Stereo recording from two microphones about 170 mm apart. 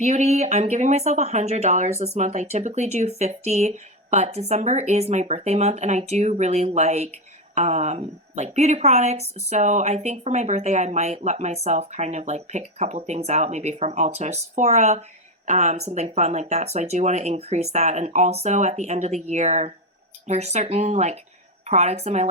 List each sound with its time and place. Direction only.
0.0 s speech: 40° right (ahead or behind)